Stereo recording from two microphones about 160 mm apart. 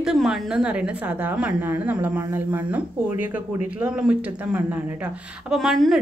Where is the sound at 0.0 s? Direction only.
5° right (ahead or behind).